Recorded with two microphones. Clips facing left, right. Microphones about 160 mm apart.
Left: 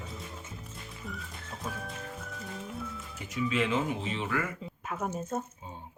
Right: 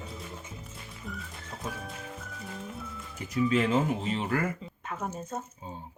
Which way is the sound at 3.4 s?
40° right (ahead or behind).